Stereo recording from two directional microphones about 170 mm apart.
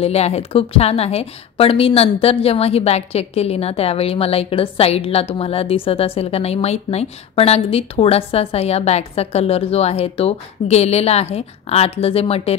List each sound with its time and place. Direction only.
0.0 s a woman's voice: 35° left (ahead or behind)